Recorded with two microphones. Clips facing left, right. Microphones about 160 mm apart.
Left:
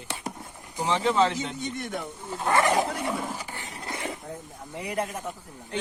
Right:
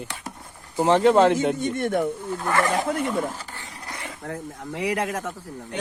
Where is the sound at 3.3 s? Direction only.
15° left (ahead or behind).